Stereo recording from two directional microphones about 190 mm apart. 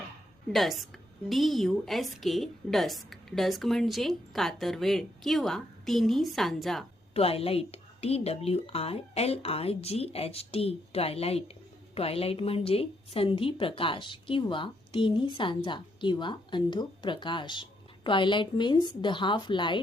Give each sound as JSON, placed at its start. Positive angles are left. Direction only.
{"t": 0.5, "sound": "a woman's voice", "side_deg": 0}
{"t": 7.1, "sound": "a woman's voice", "side_deg": 30}